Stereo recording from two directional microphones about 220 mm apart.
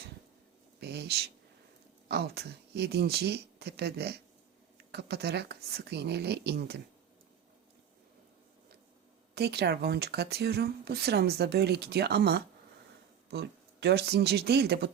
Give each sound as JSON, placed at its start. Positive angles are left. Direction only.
{"t": 0.8, "sound": "speech", "side_deg": -45}
{"t": 9.3, "sound": "speech", "side_deg": -45}